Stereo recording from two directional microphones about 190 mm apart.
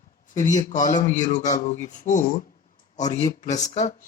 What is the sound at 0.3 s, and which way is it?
Speech, 40° left (ahead or behind).